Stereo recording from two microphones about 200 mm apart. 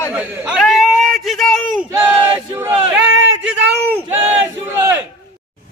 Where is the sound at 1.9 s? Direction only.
15° right (ahead or behind).